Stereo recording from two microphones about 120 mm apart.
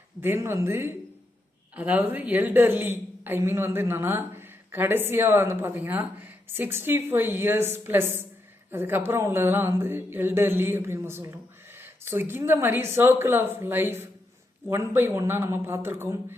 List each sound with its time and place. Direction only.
0.2 s a woman's voice: 20° right (ahead or behind)